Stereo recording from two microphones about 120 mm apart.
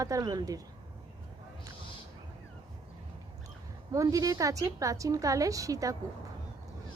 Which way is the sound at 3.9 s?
30° right (ahead or behind).